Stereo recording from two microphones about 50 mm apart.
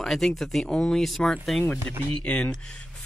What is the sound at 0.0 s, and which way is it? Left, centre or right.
Speech, centre.